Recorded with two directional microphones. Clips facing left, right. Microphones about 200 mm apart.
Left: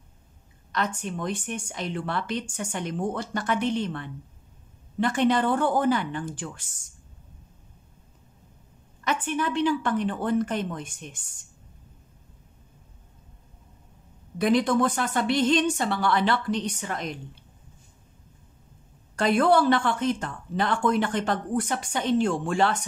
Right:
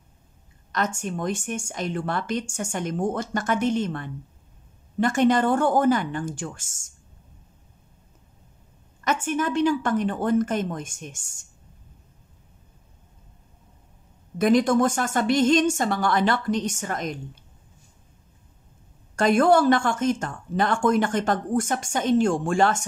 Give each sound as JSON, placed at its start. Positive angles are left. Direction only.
{"t": 0.7, "sound": "speech", "side_deg": -45}
{"t": 9.0, "sound": "speech", "side_deg": -45}
{"t": 14.4, "sound": "speech", "side_deg": -45}
{"t": 19.1, "sound": "speech", "side_deg": -45}